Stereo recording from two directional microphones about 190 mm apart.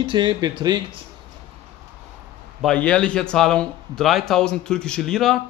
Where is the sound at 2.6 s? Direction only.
5° left (ahead or behind).